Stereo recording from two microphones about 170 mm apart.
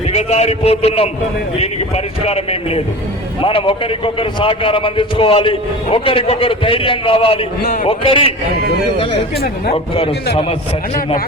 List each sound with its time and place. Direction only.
0.1 s a man's voice: 40° left (ahead or behind)
2.2 s a man's voice: 35° left (ahead or behind)
9.6 s a man's voice: 35° left (ahead or behind)